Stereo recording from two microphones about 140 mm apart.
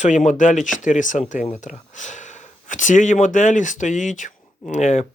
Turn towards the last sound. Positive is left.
turn(degrees=60)  # may be behind; listen again after turning